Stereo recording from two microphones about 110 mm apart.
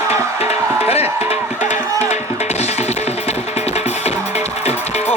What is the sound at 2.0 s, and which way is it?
Music, 85° left.